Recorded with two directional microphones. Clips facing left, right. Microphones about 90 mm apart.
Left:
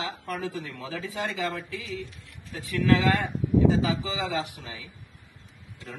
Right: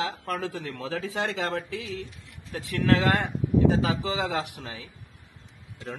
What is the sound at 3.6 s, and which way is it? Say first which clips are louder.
Speech: right 1 dB; 55° right (ahead or behind).